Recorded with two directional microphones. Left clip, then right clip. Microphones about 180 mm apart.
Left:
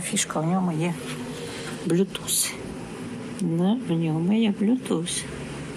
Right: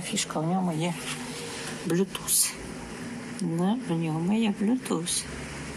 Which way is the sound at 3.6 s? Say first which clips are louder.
Left 3 dB; 5° left (ahead or behind).